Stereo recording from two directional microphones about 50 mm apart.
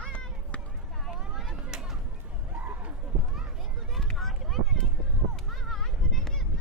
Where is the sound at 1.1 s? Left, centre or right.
Centre.